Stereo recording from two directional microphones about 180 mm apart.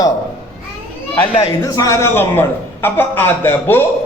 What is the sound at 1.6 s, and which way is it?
A man's voice, 20° left (ahead or behind).